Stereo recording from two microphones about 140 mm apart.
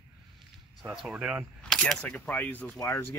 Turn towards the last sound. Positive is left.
turn(degrees=20)  # may be behind; listen again after turning